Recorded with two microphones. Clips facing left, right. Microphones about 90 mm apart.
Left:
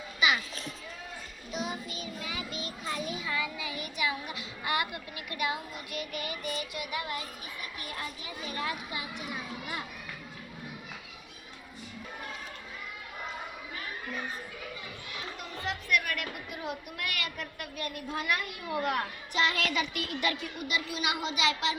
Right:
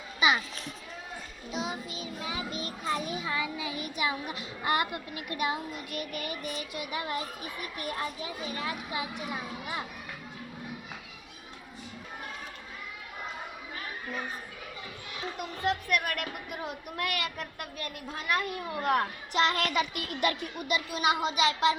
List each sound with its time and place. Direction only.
1.5 s a child's voice: 25° right (ahead or behind)
2.5 s a child's voice: 40° right (ahead or behind)
7.6 s speech: 50° right (ahead or behind)
8.2 s a child's voice: 20° right (ahead or behind)
15.4 s speech: 50° right (ahead or behind)
17.2 s a child's voice: 35° right (ahead or behind)
19.3 s speech: 55° right (ahead or behind)
20.7 s a child's voice: 40° right (ahead or behind)